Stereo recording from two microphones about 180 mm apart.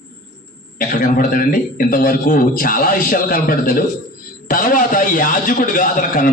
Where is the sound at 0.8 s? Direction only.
50° left (ahead or behind).